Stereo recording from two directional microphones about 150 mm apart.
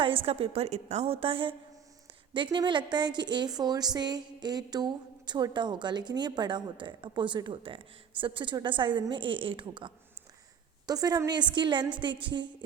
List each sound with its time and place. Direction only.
0.0 s a woman's voice: 35° right (ahead or behind)